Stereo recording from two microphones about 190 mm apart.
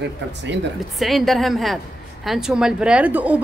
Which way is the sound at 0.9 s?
Centre (ahead or behind).